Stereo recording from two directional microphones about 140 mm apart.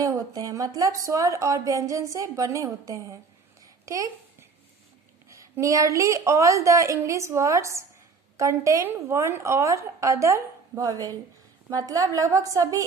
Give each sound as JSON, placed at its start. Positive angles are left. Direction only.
{"t": 0.0, "sound": "speech", "side_deg": -25}
{"t": 3.6, "sound": "a sound", "side_deg": -25}
{"t": 5.3, "sound": "speech", "side_deg": -25}